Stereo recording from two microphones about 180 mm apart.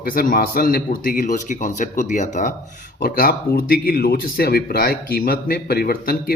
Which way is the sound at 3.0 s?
55° left (ahead or behind).